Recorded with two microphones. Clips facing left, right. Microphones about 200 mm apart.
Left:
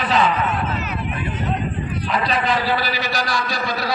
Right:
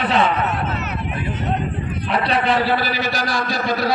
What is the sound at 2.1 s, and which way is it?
A man's voice, 65° right (ahead or behind).